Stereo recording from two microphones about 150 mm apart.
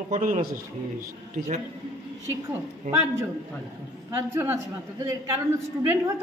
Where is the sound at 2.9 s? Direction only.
15° right (ahead or behind).